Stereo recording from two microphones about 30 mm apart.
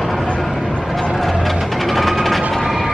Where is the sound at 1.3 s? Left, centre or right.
Centre.